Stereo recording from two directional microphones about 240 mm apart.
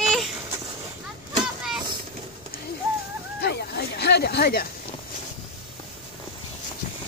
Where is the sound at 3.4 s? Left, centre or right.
Left.